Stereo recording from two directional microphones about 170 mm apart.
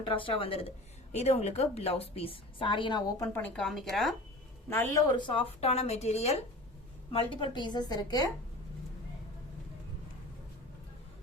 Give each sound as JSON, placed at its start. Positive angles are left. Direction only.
{"t": 0.0, "sound": "a woman's voice", "side_deg": 30}
{"t": 3.2, "sound": "speech", "side_deg": 10}
{"t": 4.7, "sound": "a woman's voice", "side_deg": 20}